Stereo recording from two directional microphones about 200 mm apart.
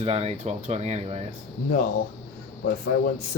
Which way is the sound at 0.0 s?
30° right (ahead or behind).